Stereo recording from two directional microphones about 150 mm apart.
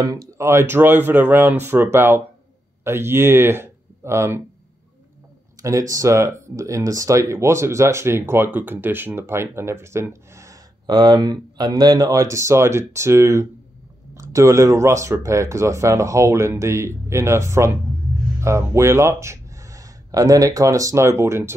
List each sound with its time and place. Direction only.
0.3 s speech: 20° right (ahead or behind)
5.6 s speech: 20° right (ahead or behind)